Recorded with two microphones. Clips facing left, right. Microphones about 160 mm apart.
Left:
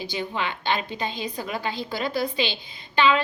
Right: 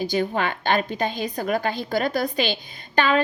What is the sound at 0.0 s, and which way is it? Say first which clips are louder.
A woman's voice: right 6 dB; 50° right (ahead or behind).